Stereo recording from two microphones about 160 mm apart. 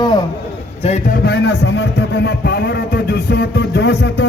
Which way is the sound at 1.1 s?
85° left.